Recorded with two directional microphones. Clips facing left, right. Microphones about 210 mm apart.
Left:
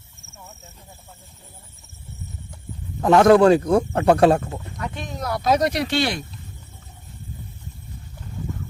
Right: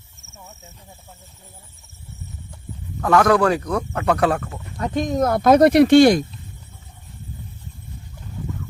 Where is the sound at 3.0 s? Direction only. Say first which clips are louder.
Left 3 dB; 25° left (ahead or behind).